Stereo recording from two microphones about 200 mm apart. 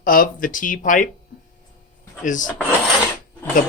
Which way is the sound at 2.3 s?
40° left (ahead or behind).